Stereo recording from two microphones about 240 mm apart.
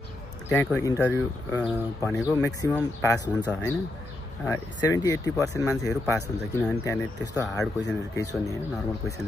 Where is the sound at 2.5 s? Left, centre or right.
Centre.